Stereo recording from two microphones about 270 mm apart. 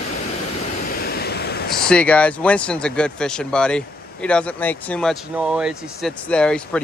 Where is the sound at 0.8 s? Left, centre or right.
Left.